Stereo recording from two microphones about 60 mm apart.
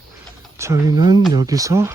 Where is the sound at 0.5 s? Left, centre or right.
Right.